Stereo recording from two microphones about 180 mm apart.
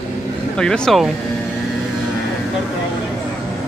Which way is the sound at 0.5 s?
5° left (ahead or behind).